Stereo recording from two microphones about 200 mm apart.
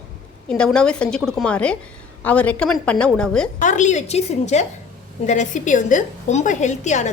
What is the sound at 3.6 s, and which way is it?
A woman's voice, 40° left (ahead or behind).